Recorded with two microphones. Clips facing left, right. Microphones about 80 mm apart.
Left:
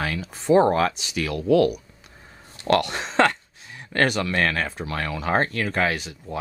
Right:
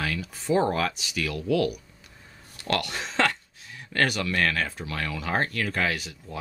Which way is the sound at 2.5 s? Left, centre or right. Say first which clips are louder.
Left 7 dB; left.